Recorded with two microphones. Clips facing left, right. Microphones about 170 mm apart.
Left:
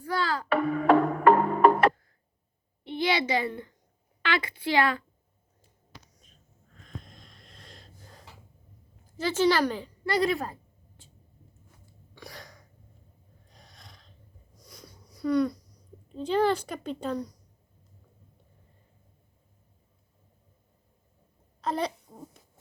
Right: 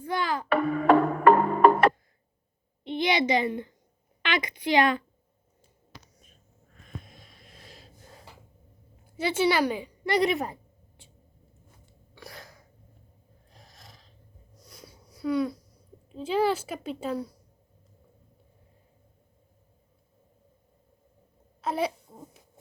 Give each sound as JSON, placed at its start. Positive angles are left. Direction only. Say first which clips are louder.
{"t": 0.0, "sound": "music", "louder": "even", "side_deg": -20}
{"t": 0.5, "sound": "music", "louder": "right 1 dB", "side_deg": -60}
{"t": 2.8, "sound": "a sound", "louder": "right 2 dB", "side_deg": -20}
{"t": 4.2, "sound": "a woman's voice", "louder": "even", "side_deg": -15}
{"t": 6.7, "sound": "wheeze", "louder": "right 1 dB", "side_deg": -5}
{"t": 9.1, "sound": "a woman's voice", "louder": "even", "side_deg": -10}
{"t": 12.1, "sound": "sneeze", "louder": "even", "side_deg": 0}
{"t": 13.5, "sound": "a sound", "louder": "right 1 dB", "side_deg": 0}
{"t": 14.5, "sound": "sniff", "louder": "right 1 dB", "side_deg": 0}
{"t": 16.0, "sound": "a woman's voice", "louder": "left 1 dB", "side_deg": -5}
{"t": 21.6, "sound": "babbling", "louder": "right 1 dB", "side_deg": -5}